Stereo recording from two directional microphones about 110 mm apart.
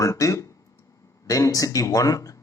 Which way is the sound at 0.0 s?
30° left (ahead or behind).